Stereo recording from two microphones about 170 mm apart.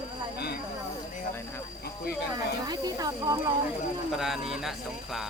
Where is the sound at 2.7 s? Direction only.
20° right (ahead or behind).